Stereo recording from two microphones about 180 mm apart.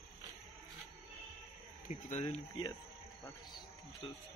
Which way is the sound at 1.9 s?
40° left (ahead or behind).